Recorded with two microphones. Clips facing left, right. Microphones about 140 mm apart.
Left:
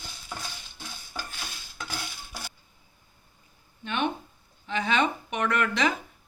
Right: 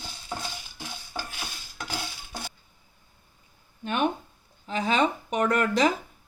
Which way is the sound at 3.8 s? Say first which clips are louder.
Right 3 dB; 45° right (ahead or behind).